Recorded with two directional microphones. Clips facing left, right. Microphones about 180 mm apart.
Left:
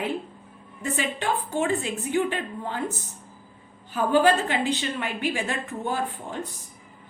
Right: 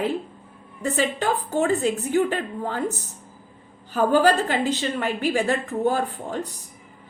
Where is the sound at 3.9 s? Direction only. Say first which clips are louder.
Right 2 dB; 40° right (ahead or behind).